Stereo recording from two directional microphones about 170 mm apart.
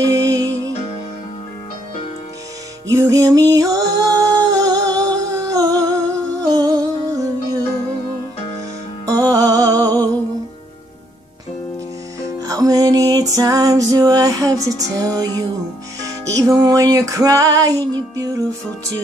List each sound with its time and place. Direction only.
0.0 s music: 20° right (ahead or behind)
2.9 s music: 20° right (ahead or behind)
9.2 s music: 20° right (ahead or behind)
12.2 s music: 20° right (ahead or behind)